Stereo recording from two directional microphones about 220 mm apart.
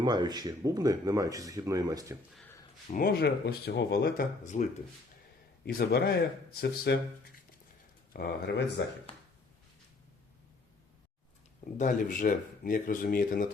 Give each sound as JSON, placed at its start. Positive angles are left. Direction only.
{"t": 0.0, "sound": "speech", "side_deg": -20}
{"t": 2.3, "sound": "a sound", "side_deg": 5}
{"t": 2.9, "sound": "speech", "side_deg": 45}
{"t": 5.6, "sound": "speech", "side_deg": 45}
{"t": 8.1, "sound": "speech", "side_deg": 45}
{"t": 9.1, "sound": "a sound", "side_deg": 25}
{"t": 11.8, "sound": "speech", "side_deg": 35}